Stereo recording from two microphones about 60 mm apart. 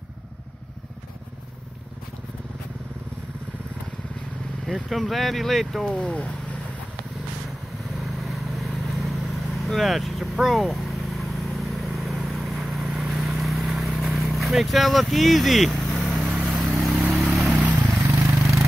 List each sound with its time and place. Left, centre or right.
4.8 s speech: centre
5.9 s speech: centre
8.2 s vehicle: centre
14.1 s speech: centre
16.2 s vehicle: centre
18.0 s vehicle: right